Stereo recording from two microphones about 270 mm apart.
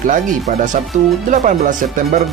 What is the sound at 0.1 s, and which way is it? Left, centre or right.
Speech, right.